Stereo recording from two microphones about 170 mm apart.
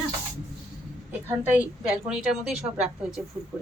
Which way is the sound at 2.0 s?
5° right (ahead or behind).